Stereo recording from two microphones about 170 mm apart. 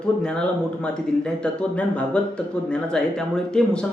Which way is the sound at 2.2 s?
5° left (ahead or behind).